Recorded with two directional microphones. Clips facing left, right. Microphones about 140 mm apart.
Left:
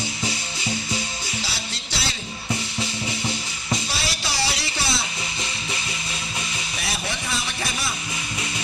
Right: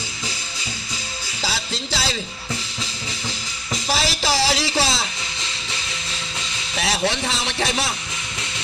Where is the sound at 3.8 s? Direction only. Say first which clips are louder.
Right 7 dB; 90° right.